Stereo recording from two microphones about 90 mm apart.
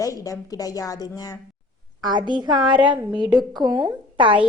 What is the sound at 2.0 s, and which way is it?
A woman's voice, 55° right (ahead or behind).